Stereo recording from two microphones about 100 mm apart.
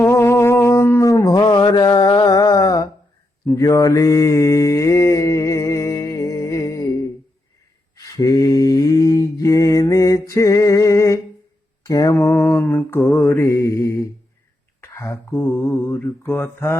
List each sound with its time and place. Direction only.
0.0 s a sound: 25° left (ahead or behind)
1.4 s mantra: 50° left (ahead or behind)
12.1 s mantra: 25° left (ahead or behind)